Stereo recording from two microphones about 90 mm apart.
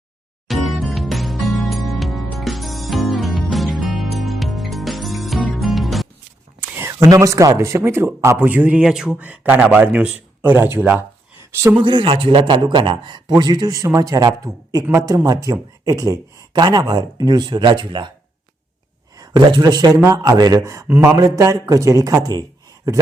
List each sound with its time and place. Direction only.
0.4 s music: centre (ahead or behind)
6.6 s a sound: 25° right (ahead or behind)
7.1 s a man's voice: 35° right (ahead or behind)
8.4 s speech: 20° right (ahead or behind)
9.1 s speech: 15° right (ahead or behind)
11.8 s a man's voice: 60° right (ahead or behind)
19.2 s a man's voice: 55° right (ahead or behind)
20.8 s speech: 20° right (ahead or behind)
21.2 s a man's voice: 40° right (ahead or behind)